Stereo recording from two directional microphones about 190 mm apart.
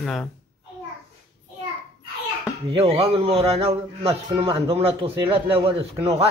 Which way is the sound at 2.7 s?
30° right (ahead or behind).